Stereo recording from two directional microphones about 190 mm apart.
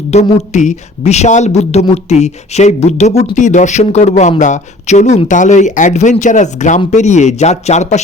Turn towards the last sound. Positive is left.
turn(degrees=35)  # may be behind; listen again after turning